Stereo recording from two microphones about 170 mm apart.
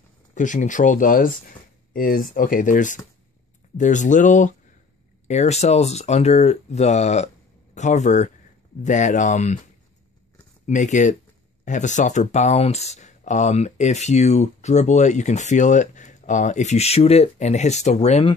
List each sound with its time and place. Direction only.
0.3 s speech: 50° left (ahead or behind)
10.7 s speech: 45° left (ahead or behind)